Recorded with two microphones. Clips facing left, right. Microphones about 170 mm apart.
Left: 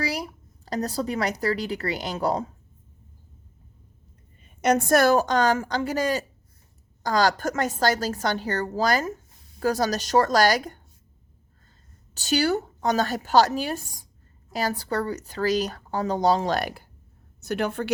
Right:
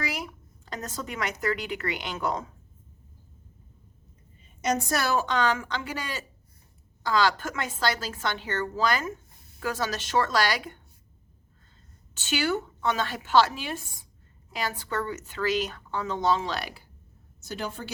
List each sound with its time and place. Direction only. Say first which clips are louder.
0.0 s a woman's voice: left 4 dB; 35° left (ahead or behind)
4.4 s a woman's voice: left 6 dB; 60° left (ahead or behind); by 10.8 s 45° left (ahead or behind)
12.1 s speech: left 4 dB; 40° left (ahead or behind)
17.4 s a woman's voice: left 8 dB; 65° left (ahead or behind)